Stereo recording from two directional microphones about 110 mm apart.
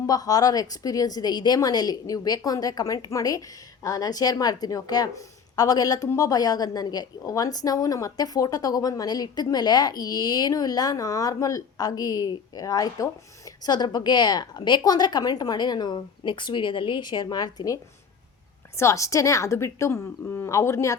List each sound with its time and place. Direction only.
0.0 s a woman's voice: 35° left (ahead or behind)
18.8 s a woman's voice: 25° left (ahead or behind)